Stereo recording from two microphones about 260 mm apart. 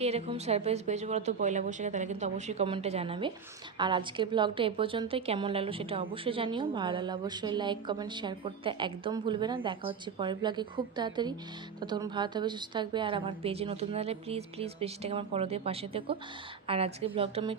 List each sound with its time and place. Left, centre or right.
0.0 s a woman's voice: right